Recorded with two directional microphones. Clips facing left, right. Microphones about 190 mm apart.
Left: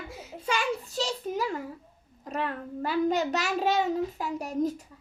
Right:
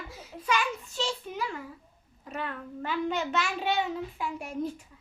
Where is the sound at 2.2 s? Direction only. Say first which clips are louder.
Left 4 dB; 40° left (ahead or behind).